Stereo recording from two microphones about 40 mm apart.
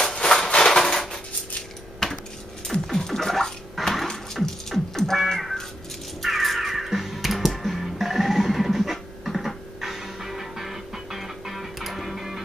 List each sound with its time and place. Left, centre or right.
0.1 s a sound: left
0.6 s a sound: centre
2.0 s cutlery: centre
2.7 s scratching: centre
4.1 s music: centre
6.2 s music: centre